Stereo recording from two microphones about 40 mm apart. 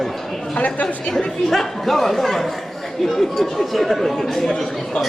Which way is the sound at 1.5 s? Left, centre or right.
Centre.